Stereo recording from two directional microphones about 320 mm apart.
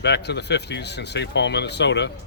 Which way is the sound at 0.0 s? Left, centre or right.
Left.